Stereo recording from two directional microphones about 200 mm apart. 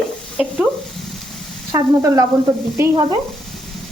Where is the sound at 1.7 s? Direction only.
20° right (ahead or behind).